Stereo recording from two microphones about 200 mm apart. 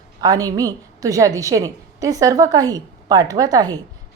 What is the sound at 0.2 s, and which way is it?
A woman's voice, 20° right (ahead or behind).